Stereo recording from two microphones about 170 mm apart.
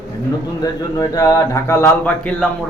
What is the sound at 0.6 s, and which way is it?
Speech, 20° left (ahead or behind).